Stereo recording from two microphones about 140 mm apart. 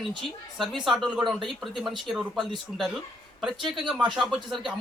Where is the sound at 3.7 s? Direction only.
5° right (ahead or behind).